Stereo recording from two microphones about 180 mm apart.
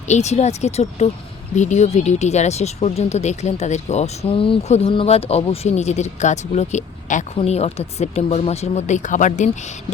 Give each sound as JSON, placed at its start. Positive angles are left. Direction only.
{"t": 0.1, "sound": "speech", "side_deg": 40}